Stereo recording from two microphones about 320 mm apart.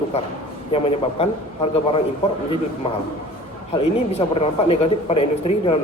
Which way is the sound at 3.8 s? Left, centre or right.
Centre.